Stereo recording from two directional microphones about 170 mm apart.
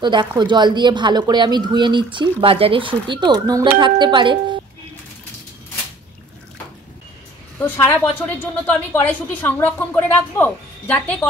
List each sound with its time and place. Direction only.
0.0 s speech: 25° right (ahead or behind)
7.5 s a woman's voice: 15° left (ahead or behind)